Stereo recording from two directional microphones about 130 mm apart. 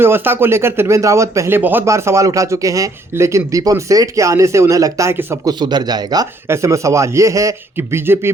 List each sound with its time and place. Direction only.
0.0 s speech: 15° right (ahead or behind)
5.5 s a man's voice: 35° right (ahead or behind); by 8.3 s 20° right (ahead or behind)